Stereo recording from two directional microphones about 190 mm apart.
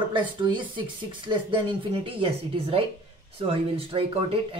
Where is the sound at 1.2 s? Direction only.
25° right (ahead or behind).